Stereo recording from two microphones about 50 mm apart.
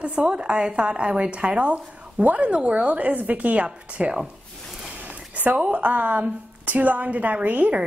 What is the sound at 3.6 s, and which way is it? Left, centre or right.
Speech, centre.